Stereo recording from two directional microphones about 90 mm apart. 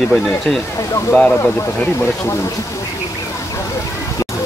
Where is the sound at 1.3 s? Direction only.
30° left (ahead or behind).